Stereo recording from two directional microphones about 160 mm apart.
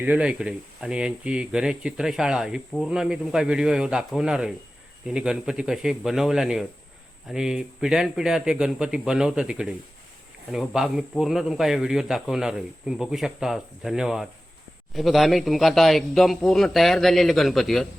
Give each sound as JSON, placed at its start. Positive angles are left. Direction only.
{"t": 0.0, "sound": "speech", "side_deg": -10}